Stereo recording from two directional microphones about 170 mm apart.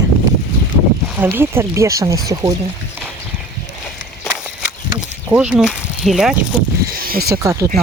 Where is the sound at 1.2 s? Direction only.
10° right (ahead or behind).